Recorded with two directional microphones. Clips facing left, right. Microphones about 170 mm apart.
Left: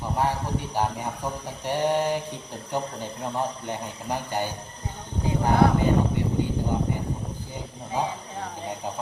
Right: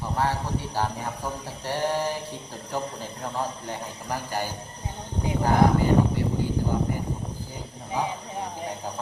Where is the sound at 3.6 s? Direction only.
20° left (ahead or behind).